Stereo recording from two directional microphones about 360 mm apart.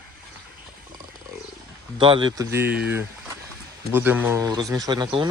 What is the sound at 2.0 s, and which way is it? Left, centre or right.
Speech, centre.